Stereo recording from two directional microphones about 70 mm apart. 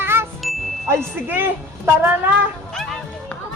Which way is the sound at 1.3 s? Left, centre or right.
Right.